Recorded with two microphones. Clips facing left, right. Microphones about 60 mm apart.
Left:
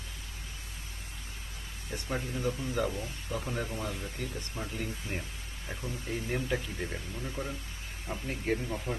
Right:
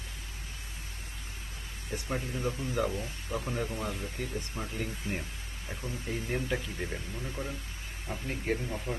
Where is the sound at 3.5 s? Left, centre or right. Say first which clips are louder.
Right 2 dB; centre.